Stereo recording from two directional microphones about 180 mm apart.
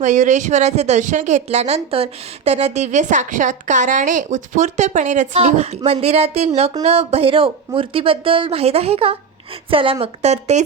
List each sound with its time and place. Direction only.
0.0 s a woman's voice: 45° right (ahead or behind)